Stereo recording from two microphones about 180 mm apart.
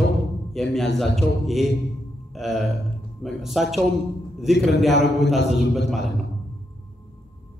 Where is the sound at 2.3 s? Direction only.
Centre (ahead or behind).